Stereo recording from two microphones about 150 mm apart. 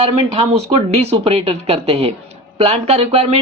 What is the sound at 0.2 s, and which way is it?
A man's voice, 50° right (ahead or behind).